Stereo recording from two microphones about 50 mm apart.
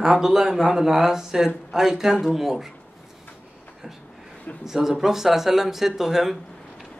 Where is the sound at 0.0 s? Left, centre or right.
Centre.